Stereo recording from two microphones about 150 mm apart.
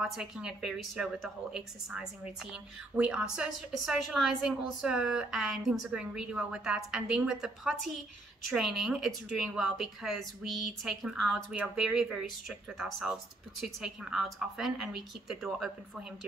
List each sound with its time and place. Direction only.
0.0 s a woman's voice: 5° right (ahead or behind)